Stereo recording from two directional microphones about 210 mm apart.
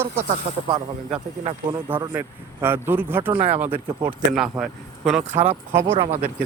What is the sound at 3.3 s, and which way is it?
Speech, 25° right (ahead or behind).